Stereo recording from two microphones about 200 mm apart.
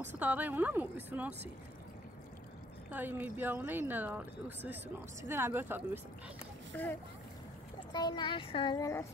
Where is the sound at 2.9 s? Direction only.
10° right (ahead or behind).